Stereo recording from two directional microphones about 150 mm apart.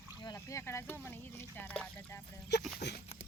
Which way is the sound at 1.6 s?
10° left (ahead or behind).